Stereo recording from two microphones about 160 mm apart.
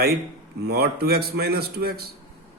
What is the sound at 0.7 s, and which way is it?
Speech, 90° right.